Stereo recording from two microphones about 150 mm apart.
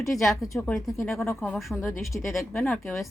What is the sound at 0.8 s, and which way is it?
Speech, 20° left (ahead or behind).